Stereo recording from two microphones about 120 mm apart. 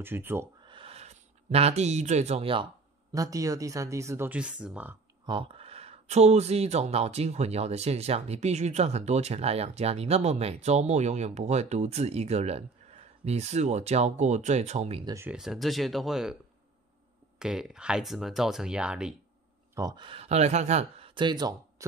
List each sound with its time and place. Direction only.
0.0 s speech: 20° right (ahead or behind)
0.7 s a sound: 50° right (ahead or behind)
3.1 s speech: 30° right (ahead or behind)
4.3 s speech: 10° right (ahead or behind)
5.2 s speech: 45° right (ahead or behind)
15.2 s speech: 5° right (ahead or behind)
17.4 s speech: 5° right (ahead or behind)
19.7 s speech: 30° right (ahead or behind)
20.0 s speech: 50° right (ahead or behind); by 21.1 s 70° right (ahead or behind)
21.1 s speech: 40° right (ahead or behind)